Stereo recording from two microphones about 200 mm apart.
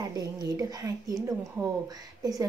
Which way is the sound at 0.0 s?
20° right (ahead or behind).